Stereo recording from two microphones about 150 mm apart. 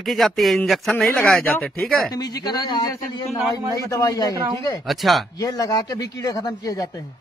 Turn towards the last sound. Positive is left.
turn(degrees=25)  # may be behind; listen again after turning